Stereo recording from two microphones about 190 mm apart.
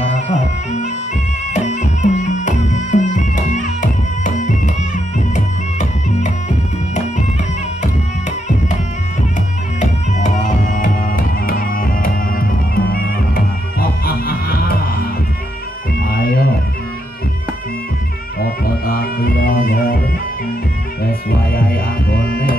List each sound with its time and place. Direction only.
0.1 s music: 40° left (ahead or behind)
9.8 s music: 40° left (ahead or behind)
16.1 s a sound: 50° left (ahead or behind)
18.4 s music: 50° left (ahead or behind)
21.0 s music: 50° left (ahead or behind)